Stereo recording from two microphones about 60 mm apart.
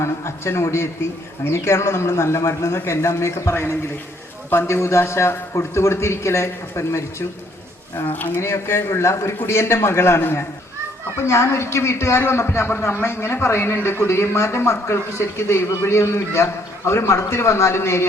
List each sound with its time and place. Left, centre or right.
0.0 s a man's voice: left
3.5 s a man's voice: left
8.4 s a man's voice: left